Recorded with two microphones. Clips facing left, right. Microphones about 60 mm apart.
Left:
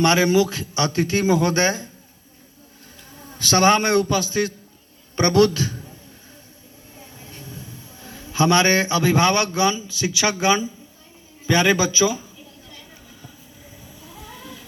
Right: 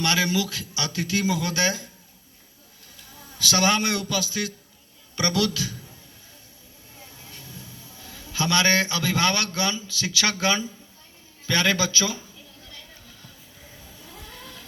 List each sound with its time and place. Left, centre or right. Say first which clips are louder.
0.0 s a man's voice: left 7 dB; left
3.2 s a man's voice: left 5 dB; left
7.2 s a man's voice: left 6 dB; left
14.3 s a sound: left 5 dB; centre